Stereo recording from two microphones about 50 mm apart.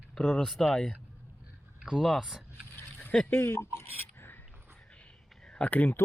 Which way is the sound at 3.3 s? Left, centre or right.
Left.